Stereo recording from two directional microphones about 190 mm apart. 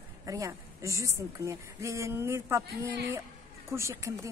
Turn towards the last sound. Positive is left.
turn(degrees=-15)  # may be behind; listen again after turning